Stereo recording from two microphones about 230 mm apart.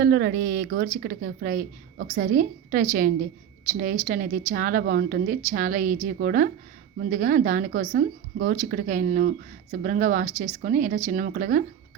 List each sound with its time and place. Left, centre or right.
0.0 s a woman's voice: right